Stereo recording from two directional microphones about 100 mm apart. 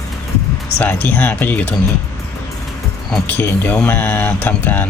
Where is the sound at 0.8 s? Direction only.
20° left (ahead or behind).